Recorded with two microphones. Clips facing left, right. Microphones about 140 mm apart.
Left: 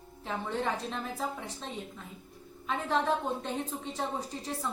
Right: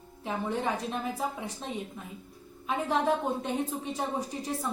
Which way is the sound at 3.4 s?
15° right (ahead or behind).